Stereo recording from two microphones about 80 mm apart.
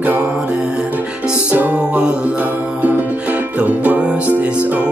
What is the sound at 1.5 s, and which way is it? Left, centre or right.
Music, right.